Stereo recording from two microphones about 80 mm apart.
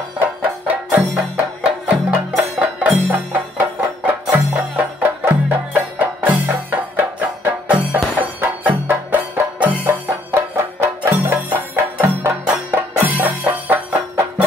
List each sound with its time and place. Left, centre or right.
1.3 s music: centre
10.3 s music: right